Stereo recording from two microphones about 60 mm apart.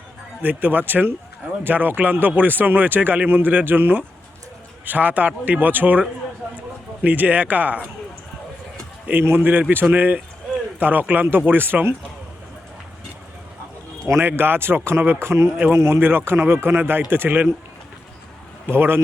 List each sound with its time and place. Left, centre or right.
0.4 s speech: right
9.2 s speech: right
14.2 s speech: right
18.7 s speech: right